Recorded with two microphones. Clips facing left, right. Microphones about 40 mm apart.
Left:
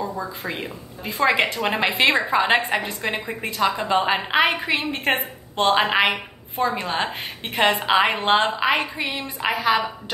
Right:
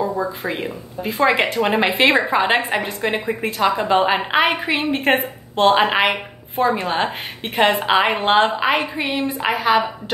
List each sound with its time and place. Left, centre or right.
0.0 s a woman's voice: centre